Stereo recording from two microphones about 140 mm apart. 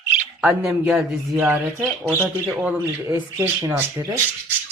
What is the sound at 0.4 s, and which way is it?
Speech, 15° right (ahead or behind).